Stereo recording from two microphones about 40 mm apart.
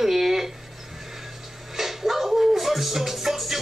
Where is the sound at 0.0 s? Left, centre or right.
Centre.